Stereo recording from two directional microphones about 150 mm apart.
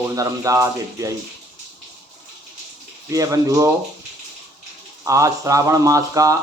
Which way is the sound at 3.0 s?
20° right (ahead or behind).